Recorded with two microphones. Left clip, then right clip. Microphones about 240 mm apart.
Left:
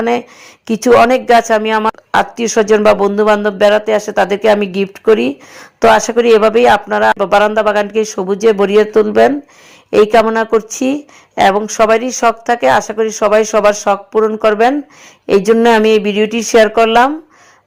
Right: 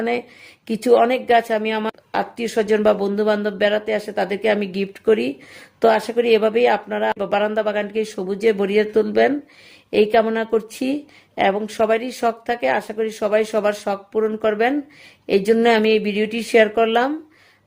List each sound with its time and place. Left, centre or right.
0.7 s a woman's voice: centre
8.0 s a man's voice: centre
14.2 s a man's voice: centre
15.8 s a man's voice: centre